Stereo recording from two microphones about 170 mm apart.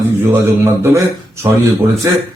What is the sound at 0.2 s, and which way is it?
Speech, 15° right (ahead or behind).